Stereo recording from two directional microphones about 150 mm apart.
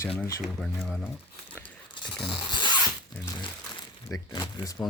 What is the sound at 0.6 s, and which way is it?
Speech, centre (ahead or behind).